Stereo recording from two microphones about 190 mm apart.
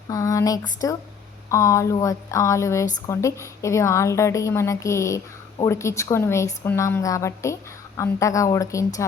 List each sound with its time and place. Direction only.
0.1 s a woman's voice: 15° left (ahead or behind)